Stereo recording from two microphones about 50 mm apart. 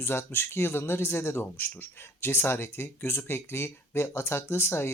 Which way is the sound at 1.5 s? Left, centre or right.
Left.